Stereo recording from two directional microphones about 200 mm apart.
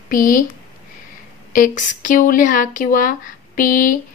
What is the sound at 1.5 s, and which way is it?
A woman's voice, 40° left (ahead or behind).